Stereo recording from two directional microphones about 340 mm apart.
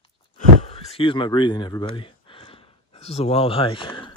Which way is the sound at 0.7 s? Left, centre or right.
Centre.